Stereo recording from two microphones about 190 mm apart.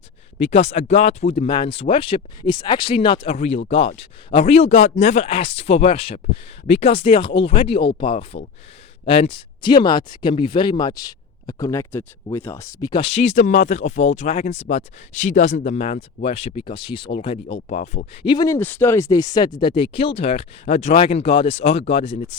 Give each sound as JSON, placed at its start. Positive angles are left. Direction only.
{"t": 0.3, "sound": "speech", "side_deg": 30}
{"t": 13.0, "sound": "speech", "side_deg": 30}
{"t": 17.2, "sound": "speech", "side_deg": 40}
{"t": 18.3, "sound": "speech", "side_deg": 20}